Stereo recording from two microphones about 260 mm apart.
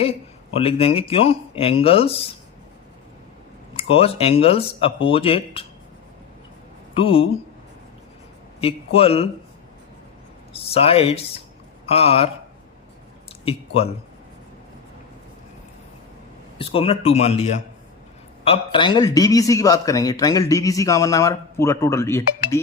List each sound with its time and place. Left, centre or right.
0.5 s speech: left
3.8 s speech: left
6.9 s speech: left
8.6 s speech: left
10.5 s speech: left
13.4 s speech: left
16.6 s a man's voice: left